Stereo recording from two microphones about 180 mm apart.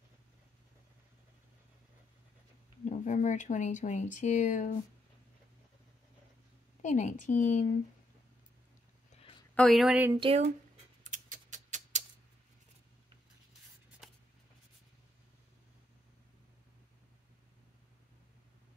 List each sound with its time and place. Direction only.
2.8 s speech: 45° left (ahead or behind)
6.8 s speech: 40° left (ahead or behind)
9.1 s a sound: 40° left (ahead or behind)
9.6 s a woman's voice: centre (ahead or behind)
10.2 s speech: 35° right (ahead or behind)
11.1 s a sound: 45° right (ahead or behind)
14.0 s writing: centre (ahead or behind)